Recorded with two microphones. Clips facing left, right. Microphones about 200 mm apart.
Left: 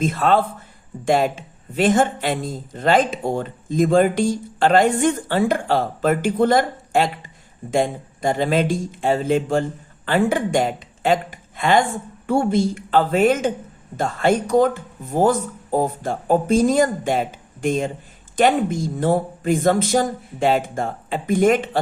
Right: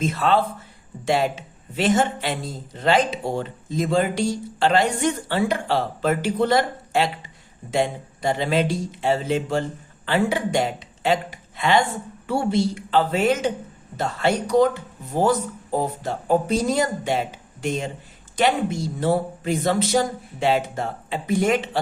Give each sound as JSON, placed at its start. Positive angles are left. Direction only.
{"t": 0.0, "sound": "a woman's voice", "side_deg": 50}